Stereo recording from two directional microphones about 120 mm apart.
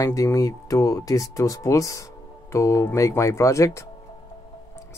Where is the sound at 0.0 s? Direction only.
25° left (ahead or behind).